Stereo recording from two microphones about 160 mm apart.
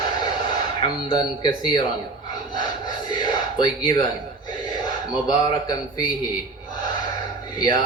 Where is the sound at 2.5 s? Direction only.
25° left (ahead or behind).